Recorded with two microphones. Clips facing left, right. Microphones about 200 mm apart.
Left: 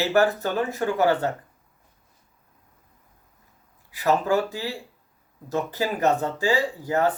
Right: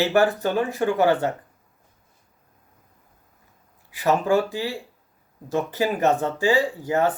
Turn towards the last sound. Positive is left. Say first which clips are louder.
# right 2 dB
turn(degrees=-20)  # may be behind; listen again after turning